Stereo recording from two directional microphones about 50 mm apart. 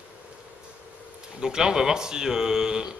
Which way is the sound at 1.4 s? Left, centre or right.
Centre.